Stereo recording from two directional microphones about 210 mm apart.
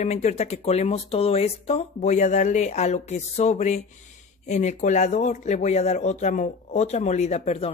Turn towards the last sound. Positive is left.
turn(degrees=30)  # may be behind; listen again after turning